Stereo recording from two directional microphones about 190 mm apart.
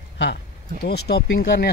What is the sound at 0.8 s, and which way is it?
Speech, 60° left (ahead or behind).